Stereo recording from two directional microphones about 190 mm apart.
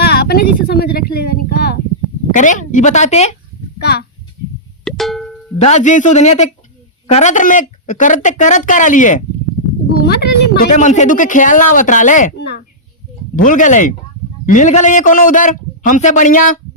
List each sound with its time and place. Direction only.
0.0 s a sound: 55° left (ahead or behind)
2.3 s speech: 40° left (ahead or behind)
3.8 s a child's voice: 60° left (ahead or behind)
4.9 s music: centre (ahead or behind)
5.5 s speech: 35° left (ahead or behind)
10.0 s speech: 55° left (ahead or behind)
10.7 s speech: 40° left (ahead or behind)
12.4 s a sound: 60° left (ahead or behind)
13.3 s speech: 45° left (ahead or behind)